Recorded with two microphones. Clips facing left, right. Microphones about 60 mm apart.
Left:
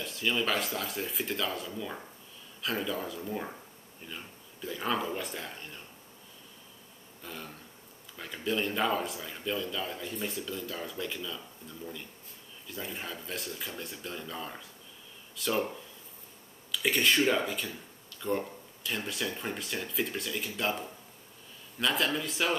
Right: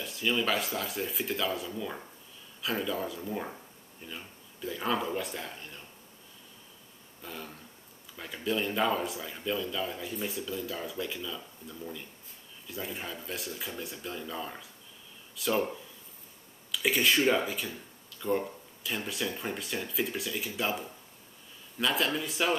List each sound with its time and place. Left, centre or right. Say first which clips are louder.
0.0 s speech: right 1 dB; centre
7.2 s speech: right 1 dB; centre
16.7 s speech: even; centre